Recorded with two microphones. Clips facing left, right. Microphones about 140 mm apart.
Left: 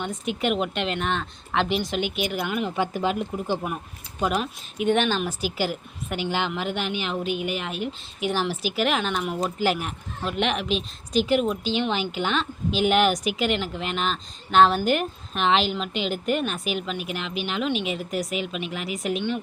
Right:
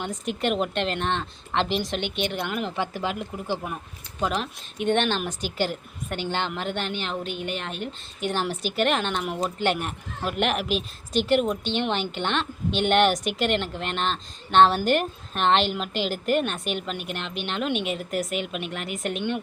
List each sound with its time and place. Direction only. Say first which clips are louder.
0.0 s a woman's voice: left 1 dB; centre (ahead or behind)
2.7 s a woman's voice: left 4 dB; 15° left (ahead or behind)